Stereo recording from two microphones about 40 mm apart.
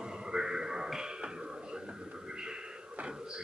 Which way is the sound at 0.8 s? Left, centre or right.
Centre.